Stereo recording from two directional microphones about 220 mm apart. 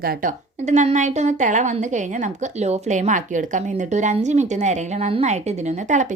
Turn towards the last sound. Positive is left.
turn(degrees=-35)  # may be behind; listen again after turning